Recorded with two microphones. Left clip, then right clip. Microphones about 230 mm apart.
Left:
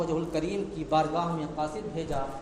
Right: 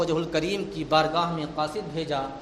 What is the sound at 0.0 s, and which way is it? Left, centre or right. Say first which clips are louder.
A man's voice: right 4 dB; right.